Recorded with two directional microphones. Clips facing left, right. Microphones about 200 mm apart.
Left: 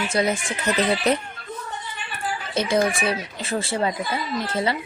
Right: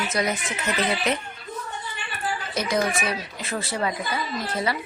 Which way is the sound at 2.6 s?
30° left (ahead or behind).